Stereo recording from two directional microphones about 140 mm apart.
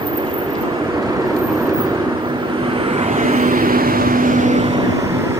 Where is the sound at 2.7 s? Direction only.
45° right (ahead or behind).